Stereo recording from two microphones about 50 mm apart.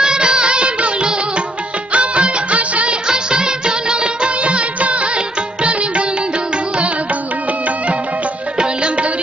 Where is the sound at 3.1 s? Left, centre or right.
Centre.